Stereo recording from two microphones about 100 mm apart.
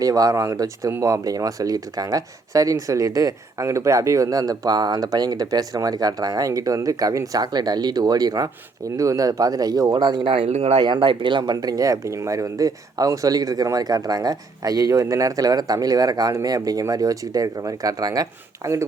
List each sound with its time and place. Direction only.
0.0 s speech: 35° right (ahead or behind)